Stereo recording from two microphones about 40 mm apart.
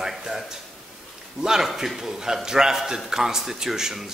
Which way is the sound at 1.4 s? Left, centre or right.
Centre.